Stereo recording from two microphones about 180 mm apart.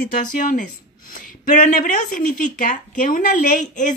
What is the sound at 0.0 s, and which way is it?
Speech, 50° left (ahead or behind).